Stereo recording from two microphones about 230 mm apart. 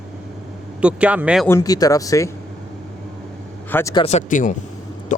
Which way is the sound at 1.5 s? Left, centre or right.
Centre.